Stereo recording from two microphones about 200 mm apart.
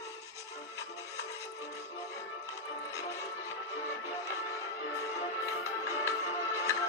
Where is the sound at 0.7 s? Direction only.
15° left (ahead or behind).